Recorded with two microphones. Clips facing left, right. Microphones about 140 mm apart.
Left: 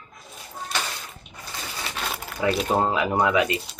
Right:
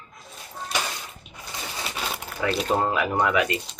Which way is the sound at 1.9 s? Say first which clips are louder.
Left 2 dB; 5° right (ahead or behind).